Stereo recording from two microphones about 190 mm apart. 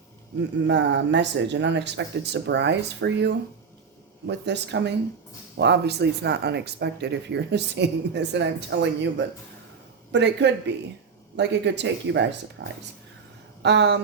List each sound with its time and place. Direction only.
0.7 s speech: 65° right (ahead or behind)
13.6 s speech: 65° right (ahead or behind)